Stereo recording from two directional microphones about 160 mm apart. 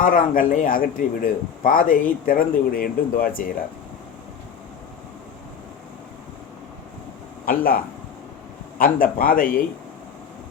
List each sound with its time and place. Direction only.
0.0 s a man's voice: 60° left (ahead or behind)
7.4 s speech: 60° left (ahead or behind)
8.8 s a man's voice: 65° left (ahead or behind)